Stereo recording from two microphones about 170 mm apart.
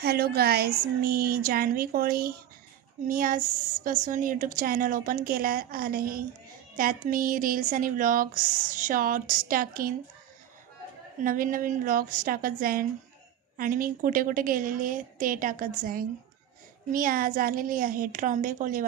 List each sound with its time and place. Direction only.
0.0 s a woman's voice: 65° right (ahead or behind)
11.2 s a woman's voice: 55° right (ahead or behind)